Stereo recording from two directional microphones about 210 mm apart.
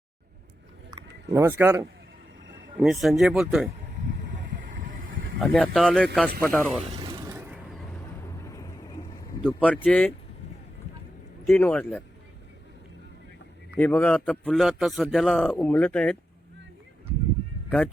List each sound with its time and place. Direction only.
1.3 s speech: 10° right (ahead or behind)
2.8 s a man's voice: centre (ahead or behind)
4.2 s vehicle: 60° right (ahead or behind)
4.8 s vehicle: 40° right (ahead or behind)
5.4 s a man's voice: 5° left (ahead or behind)
7.0 s a sound: 20° right (ahead or behind)
8.4 s vehicle: 15° left (ahead or behind)
9.4 s speech: 5° left (ahead or behind)
11.4 s speech: 10° left (ahead or behind)
13.7 s a man's voice: 10° left (ahead or behind)
17.7 s speech: 5° left (ahead or behind)